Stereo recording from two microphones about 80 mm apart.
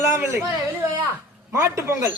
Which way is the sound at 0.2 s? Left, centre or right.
Right.